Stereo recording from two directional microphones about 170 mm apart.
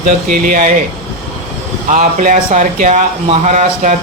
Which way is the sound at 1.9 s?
45° right (ahead or behind).